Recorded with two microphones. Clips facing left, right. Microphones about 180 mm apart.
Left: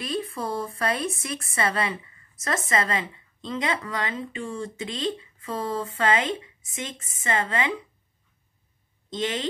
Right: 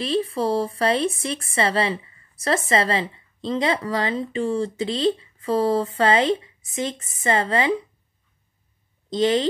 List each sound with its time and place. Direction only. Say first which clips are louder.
0.0 s a woman's voice: right 7 dB; 30° right (ahead or behind)
9.1 s a woman's voice: right 9 dB; 35° right (ahead or behind)